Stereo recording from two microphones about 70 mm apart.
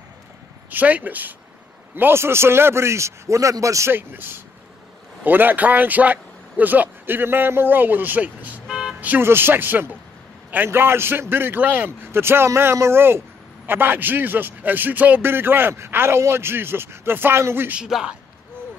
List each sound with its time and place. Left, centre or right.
0.7 s a man's voice: right
3.9 s speech: right
8.6 s vehicle: centre
9.2 s a man's voice: right
17.8 s a man's voice: centre